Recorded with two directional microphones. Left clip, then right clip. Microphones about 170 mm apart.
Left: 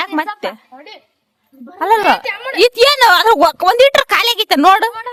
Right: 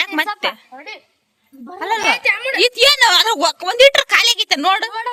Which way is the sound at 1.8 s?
50° left (ahead or behind).